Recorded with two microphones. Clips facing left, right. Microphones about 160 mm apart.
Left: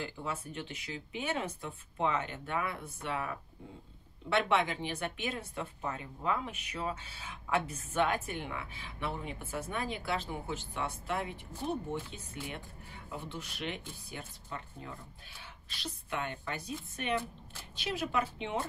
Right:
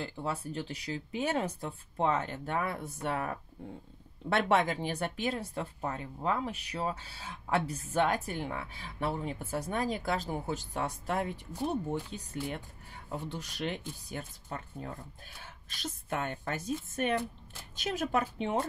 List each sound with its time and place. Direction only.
0.0 s speech: 35° right (ahead or behind)